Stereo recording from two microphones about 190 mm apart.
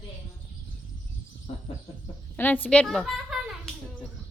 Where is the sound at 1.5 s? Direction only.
30° left (ahead or behind).